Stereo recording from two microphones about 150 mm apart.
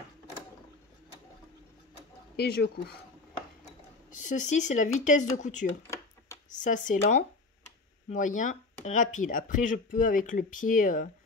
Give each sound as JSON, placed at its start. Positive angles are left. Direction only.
{"t": 2.3, "sound": "speech", "side_deg": 90}
{"t": 4.1, "sound": "speech", "side_deg": 55}